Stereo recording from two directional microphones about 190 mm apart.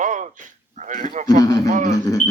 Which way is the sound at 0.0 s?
40° right (ahead or behind).